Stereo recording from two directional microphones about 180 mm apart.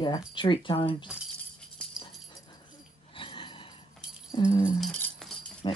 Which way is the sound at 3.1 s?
30° left (ahead or behind).